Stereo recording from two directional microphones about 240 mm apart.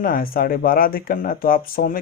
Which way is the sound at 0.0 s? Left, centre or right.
Left.